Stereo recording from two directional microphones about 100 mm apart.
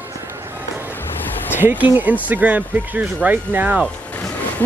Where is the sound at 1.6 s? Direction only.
20° right (ahead or behind).